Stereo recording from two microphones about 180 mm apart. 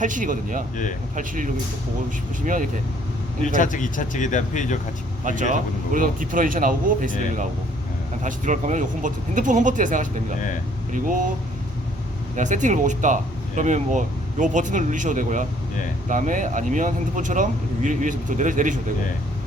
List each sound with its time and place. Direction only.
0.0 s speech: 45° right (ahead or behind)
3.6 s speech: 45° left (ahead or behind)
5.4 s speech: 45° right (ahead or behind)
12.4 s speech: 45° right (ahead or behind)